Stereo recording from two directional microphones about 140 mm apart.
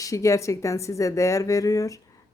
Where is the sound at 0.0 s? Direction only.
25° left (ahead or behind).